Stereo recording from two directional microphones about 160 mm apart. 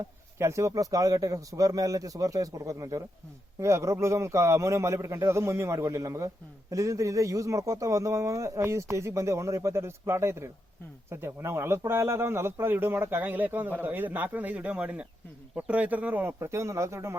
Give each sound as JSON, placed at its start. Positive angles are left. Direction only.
{"t": 0.0, "sound": "a man's voice", "side_deg": -15}